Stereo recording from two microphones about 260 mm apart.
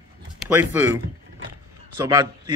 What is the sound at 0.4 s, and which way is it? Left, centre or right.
Speech, centre.